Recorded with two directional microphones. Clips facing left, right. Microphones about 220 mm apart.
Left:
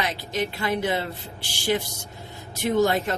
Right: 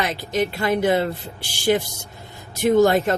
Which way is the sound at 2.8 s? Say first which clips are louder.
Right 5 dB; 50° right (ahead or behind).